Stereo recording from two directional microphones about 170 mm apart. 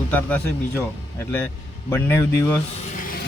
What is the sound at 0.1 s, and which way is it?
Speech, 10° left (ahead or behind).